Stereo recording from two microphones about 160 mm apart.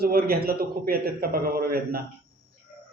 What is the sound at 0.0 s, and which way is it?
A man's voice, 70° right (ahead or behind).